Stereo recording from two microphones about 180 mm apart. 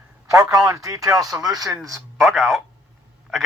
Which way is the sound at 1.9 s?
Centre (ahead or behind).